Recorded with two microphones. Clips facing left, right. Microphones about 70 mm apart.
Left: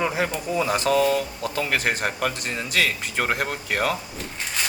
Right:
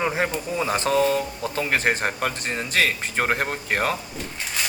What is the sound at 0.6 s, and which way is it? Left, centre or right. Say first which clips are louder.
Speech: even; right.